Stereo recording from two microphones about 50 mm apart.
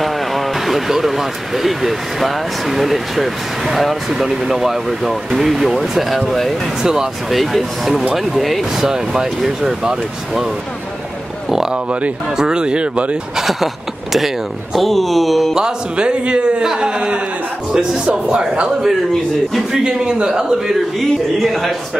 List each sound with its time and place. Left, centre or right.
0.0 s speech: centre
6.8 s a man's voice: centre
8.9 s a man's voice: centre
11.7 s a man's voice: right
13.4 s speech: centre
15.5 s a man's voice: centre
21.4 s speech: centre